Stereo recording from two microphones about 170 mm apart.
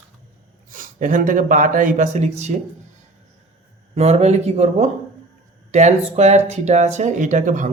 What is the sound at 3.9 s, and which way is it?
Speech, 40° right (ahead or behind).